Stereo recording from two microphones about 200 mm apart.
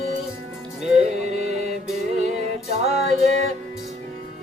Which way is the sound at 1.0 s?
35° right (ahead or behind).